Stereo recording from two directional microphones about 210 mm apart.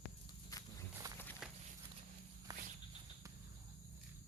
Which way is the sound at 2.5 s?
15° right (ahead or behind).